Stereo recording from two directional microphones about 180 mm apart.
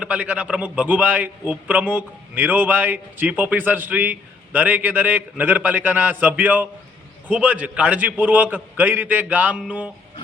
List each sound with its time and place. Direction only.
0.0 s a man's voice: 10° right (ahead or behind)